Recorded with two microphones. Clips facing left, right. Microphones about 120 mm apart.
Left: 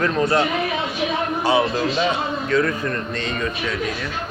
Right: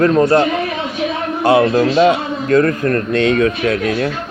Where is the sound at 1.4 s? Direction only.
55° right (ahead or behind).